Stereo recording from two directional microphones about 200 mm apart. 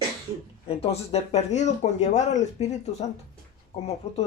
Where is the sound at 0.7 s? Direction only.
30° left (ahead or behind).